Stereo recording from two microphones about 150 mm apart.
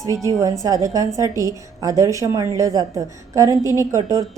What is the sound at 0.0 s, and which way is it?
A woman's voice, 20° right (ahead or behind).